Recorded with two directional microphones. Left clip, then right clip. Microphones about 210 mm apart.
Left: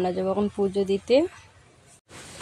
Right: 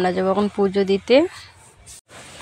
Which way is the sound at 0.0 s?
10° right (ahead or behind).